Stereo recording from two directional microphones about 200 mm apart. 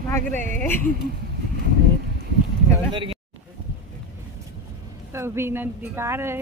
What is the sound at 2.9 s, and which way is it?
Speech, 25° right (ahead or behind).